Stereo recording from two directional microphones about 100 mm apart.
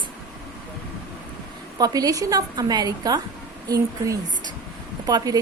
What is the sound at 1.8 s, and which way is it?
A woman's voice, 35° right (ahead or behind).